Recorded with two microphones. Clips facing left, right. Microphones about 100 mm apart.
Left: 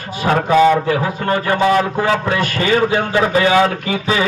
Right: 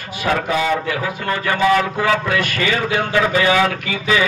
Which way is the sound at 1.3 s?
35° left (ahead or behind).